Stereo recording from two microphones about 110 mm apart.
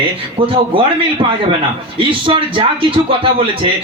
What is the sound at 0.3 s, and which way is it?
A man's voice, 55° right (ahead or behind).